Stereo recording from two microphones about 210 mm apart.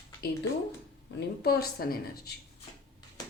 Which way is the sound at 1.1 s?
55° left (ahead or behind).